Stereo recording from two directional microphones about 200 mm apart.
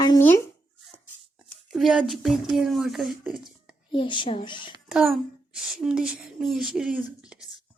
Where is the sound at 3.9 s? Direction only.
25° left (ahead or behind).